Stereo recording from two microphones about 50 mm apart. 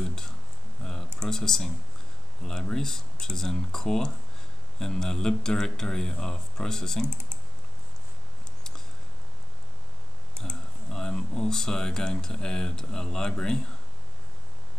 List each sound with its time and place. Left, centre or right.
0.0 s speech: centre
0.8 s typing: centre
1.2 s speech: centre
10.3 s speech: centre